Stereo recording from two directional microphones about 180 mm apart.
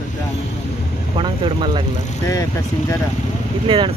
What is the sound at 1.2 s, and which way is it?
Speech, 30° right (ahead or behind).